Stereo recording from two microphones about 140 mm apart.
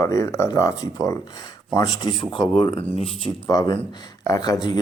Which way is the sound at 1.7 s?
30° left (ahead or behind).